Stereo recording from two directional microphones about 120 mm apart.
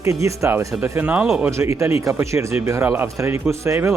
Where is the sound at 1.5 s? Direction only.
25° right (ahead or behind).